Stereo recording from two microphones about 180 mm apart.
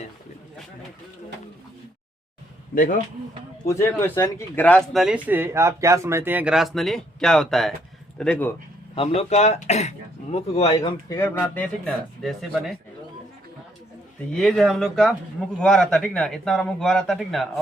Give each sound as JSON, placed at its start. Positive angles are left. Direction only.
{"t": 3.7, "sound": "speech", "side_deg": 15}
{"t": 9.0, "sound": "speech", "side_deg": 35}
{"t": 10.8, "sound": "speech", "side_deg": 20}
{"t": 14.3, "sound": "speech", "side_deg": 0}